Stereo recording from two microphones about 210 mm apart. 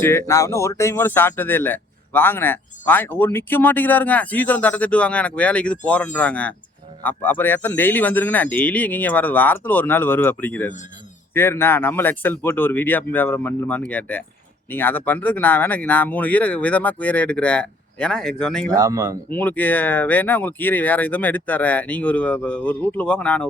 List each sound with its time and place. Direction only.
0.0 s speech: 10° left (ahead or behind)
18.7 s speech: 15° right (ahead or behind)
19.3 s speech: 10° left (ahead or behind)